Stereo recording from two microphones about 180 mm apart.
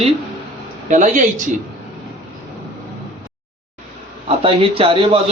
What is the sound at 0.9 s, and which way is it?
Speech, 45° right (ahead or behind).